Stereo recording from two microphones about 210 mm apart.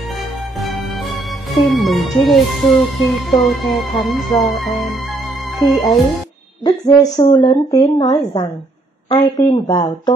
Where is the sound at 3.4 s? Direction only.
Centre (ahead or behind).